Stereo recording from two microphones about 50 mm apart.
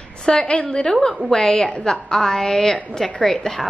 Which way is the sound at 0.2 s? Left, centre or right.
Centre.